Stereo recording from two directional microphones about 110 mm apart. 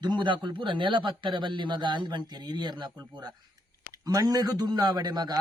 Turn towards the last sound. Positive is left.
turn(degrees=-35)  # may be behind; listen again after turning